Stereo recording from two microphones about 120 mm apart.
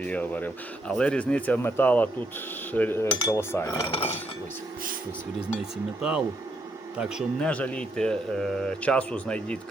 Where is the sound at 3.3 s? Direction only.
25° left (ahead or behind).